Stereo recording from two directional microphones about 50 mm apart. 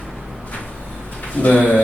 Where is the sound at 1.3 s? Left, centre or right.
Left.